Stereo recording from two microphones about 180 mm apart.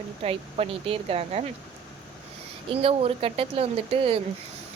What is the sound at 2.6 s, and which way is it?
Speech, 30° right (ahead or behind).